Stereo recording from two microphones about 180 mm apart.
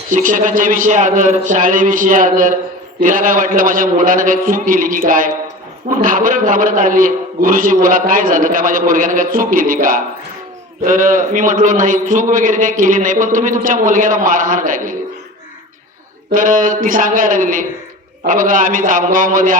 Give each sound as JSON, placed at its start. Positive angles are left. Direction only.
{"t": 0.1, "sound": "a man's voice", "side_deg": -45}
{"t": 16.3, "sound": "a man's voice", "side_deg": -50}